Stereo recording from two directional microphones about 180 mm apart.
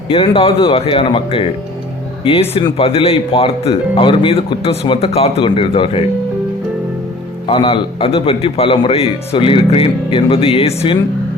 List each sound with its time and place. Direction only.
0.1 s a man's voice: 30° left (ahead or behind)
7.4 s a man's voice: 30° left (ahead or behind)